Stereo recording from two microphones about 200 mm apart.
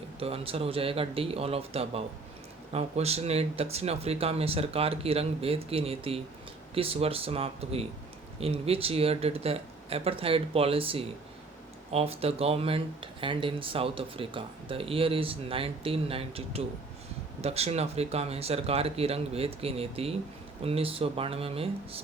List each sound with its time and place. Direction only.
0.2 s speech: 30° right (ahead or behind)